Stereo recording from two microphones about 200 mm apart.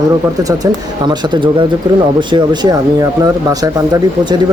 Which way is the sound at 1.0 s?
25° right (ahead or behind).